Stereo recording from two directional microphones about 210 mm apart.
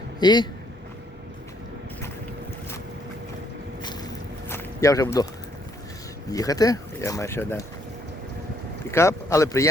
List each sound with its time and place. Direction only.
0.2 s speech: 20° left (ahead or behind)
3.8 s walk: 15° left (ahead or behind)
6.3 s speech: 15° left (ahead or behind)
8.9 s speech: 15° left (ahead or behind)